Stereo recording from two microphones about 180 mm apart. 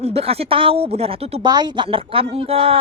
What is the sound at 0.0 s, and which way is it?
A woman's voice, 35° right (ahead or behind).